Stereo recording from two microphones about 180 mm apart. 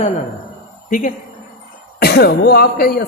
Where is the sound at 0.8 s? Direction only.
45° left (ahead or behind).